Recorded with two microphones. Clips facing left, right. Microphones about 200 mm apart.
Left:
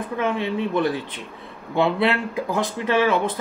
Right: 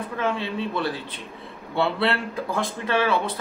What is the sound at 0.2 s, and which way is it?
A man's voice, 15° left (ahead or behind).